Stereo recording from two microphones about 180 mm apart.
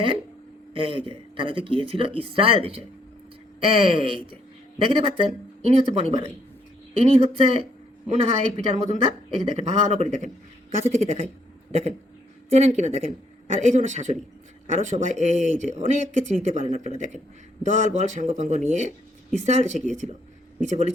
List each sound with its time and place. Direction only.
0.7 s speech: 30° right (ahead or behind)